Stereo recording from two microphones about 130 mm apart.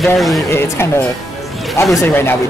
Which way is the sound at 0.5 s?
20° left (ahead or behind).